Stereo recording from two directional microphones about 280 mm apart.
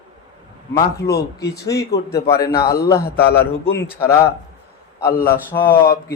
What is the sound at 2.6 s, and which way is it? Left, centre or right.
Speech, left.